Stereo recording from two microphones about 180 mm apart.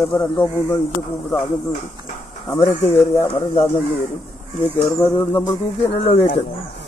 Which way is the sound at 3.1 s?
30° left (ahead or behind).